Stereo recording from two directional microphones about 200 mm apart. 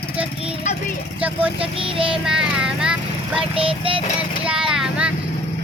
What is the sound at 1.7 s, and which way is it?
Child singing, 25° right (ahead or behind).